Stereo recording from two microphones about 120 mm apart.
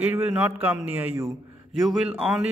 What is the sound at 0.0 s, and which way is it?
Speech, 15° right (ahead or behind).